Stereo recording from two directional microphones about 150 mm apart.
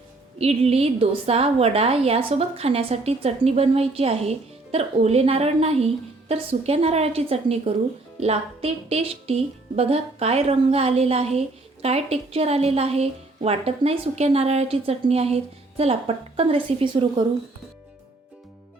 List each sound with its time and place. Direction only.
0.3 s a woman's voice: 45° right (ahead or behind)